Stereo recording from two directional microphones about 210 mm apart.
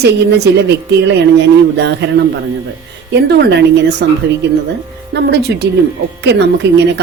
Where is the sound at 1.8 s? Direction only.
55° right (ahead or behind).